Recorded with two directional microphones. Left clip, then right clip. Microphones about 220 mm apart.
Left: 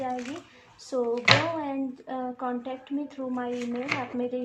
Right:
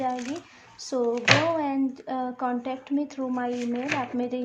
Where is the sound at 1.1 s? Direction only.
20° right (ahead or behind).